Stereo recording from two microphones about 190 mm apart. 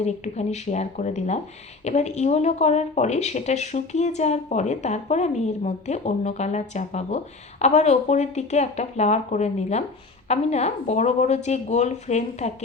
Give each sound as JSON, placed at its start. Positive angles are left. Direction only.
{"t": 0.0, "sound": "speech", "side_deg": 35}